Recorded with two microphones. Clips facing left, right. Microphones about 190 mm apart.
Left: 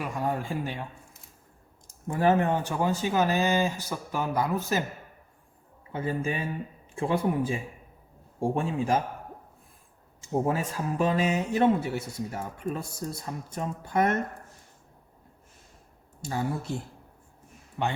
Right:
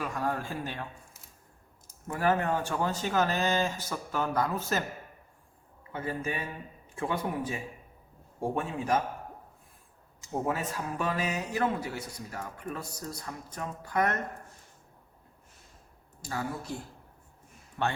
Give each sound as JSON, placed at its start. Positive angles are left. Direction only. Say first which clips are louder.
{"t": 0.0, "sound": "speech", "louder": "left 2 dB", "side_deg": 15}
{"t": 2.0, "sound": "speech", "louder": "left 4 dB", "side_deg": 20}
{"t": 5.9, "sound": "speech", "louder": "left 4 dB", "side_deg": 30}
{"t": 10.2, "sound": "speech", "louder": "left 4 dB", "side_deg": 30}
{"t": 16.2, "sound": "speech", "louder": "left 4 dB", "side_deg": 25}
{"t": 17.8, "sound": "speech", "louder": "left 1 dB", "side_deg": 15}